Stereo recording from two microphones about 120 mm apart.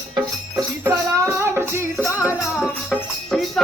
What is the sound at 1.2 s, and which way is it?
Music, 20° right (ahead or behind).